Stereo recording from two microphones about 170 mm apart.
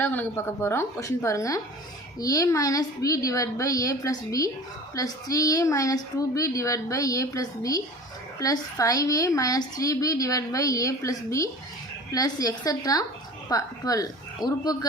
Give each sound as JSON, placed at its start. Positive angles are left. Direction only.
{"t": 0.0, "sound": "a woman's voice", "side_deg": 10}